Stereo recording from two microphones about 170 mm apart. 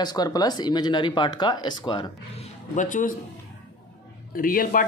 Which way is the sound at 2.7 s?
50° left (ahead or behind).